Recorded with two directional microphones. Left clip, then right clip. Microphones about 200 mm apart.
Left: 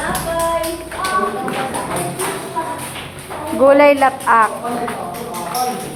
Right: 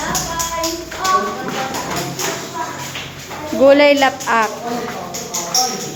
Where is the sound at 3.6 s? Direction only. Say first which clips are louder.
Even; 15° right (ahead or behind).